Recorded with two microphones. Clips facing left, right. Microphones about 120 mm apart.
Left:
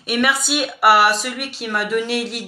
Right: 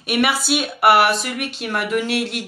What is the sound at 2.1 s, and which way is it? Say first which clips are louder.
Speech: right 1 dB; centre (ahead or behind).